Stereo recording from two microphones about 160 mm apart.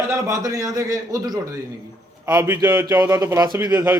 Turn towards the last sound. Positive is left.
turn(degrees=-15)  # may be behind; listen again after turning